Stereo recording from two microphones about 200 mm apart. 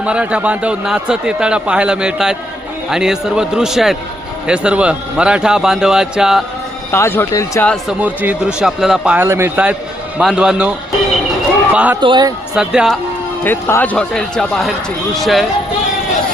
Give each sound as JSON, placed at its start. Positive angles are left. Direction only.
{"t": 0.0, "sound": "a man's voice", "side_deg": -5}
{"t": 6.9, "sound": "speech", "side_deg": 10}
{"t": 7.7, "sound": "a man's voice", "side_deg": -5}
{"t": 11.9, "sound": "speech", "side_deg": -20}
{"t": 12.5, "sound": "a man's voice", "side_deg": -5}
{"t": 13.4, "sound": "a man's voice", "side_deg": 10}